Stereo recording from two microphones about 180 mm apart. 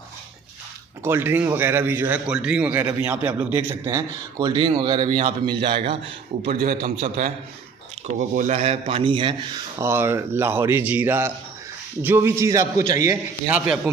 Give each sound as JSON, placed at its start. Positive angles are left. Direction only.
{"t": 1.0, "sound": "a man's voice", "side_deg": -10}
{"t": 4.4, "sound": "a man's voice", "side_deg": -25}
{"t": 6.5, "sound": "a man's voice", "side_deg": -55}
{"t": 6.8, "sound": "a man's voice", "side_deg": -40}
{"t": 9.8, "sound": "a man's voice", "side_deg": -15}
{"t": 13.5, "sound": "a man's voice", "side_deg": -10}